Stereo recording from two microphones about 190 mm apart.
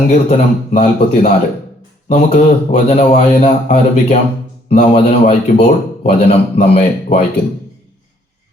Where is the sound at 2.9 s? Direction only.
35° left (ahead or behind).